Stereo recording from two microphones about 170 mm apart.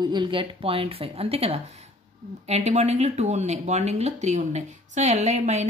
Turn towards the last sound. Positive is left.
turn(degrees=-40)  # may be behind; listen again after turning